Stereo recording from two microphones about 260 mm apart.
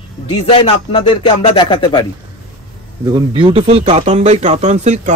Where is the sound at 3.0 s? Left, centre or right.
Centre.